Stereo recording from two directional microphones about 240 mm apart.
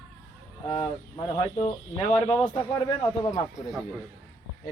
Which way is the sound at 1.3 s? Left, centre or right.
Left.